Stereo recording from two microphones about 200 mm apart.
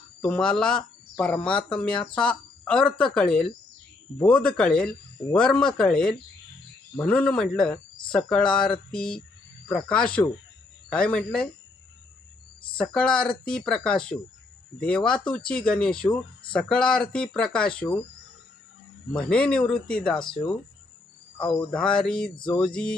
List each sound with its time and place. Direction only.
0.2 s speech: 5° left (ahead or behind)
12.7 s speech: 5° left (ahead or behind)
19.1 s speech: 5° left (ahead or behind)
20.1 s speech: 25° left (ahead or behind)
21.7 s speech: 5° left (ahead or behind)